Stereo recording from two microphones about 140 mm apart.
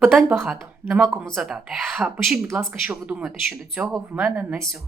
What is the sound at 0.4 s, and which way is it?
Speech, 5° right (ahead or behind).